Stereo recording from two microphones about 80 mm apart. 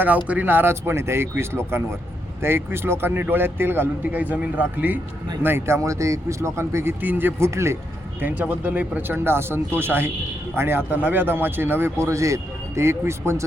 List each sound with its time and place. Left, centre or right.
0.3 s a man's voice: right
8.2 s a man's voice: centre